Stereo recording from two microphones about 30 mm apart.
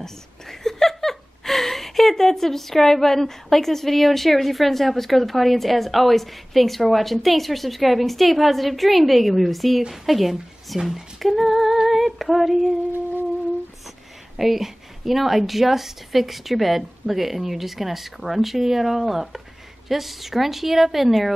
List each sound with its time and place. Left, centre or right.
0.0 s a woman's voice: centre
10.8 s a woman's voice: centre
11.1 s female singing: centre
14.3 s a woman's voice: centre